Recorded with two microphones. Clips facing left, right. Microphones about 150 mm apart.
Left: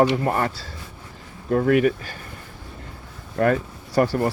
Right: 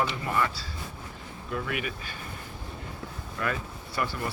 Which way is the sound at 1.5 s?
45° left (ahead or behind).